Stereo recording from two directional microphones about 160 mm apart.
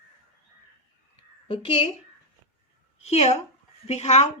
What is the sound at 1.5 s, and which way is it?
Speech, 35° left (ahead or behind).